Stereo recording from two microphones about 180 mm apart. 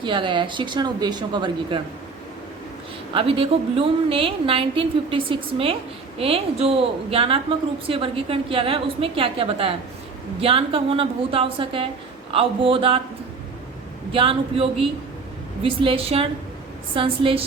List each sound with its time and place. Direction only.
0.0 s speech: 25° right (ahead or behind)
3.2 s a woman's voice: 30° right (ahead or behind)
14.1 s a woman's voice: 30° right (ahead or behind)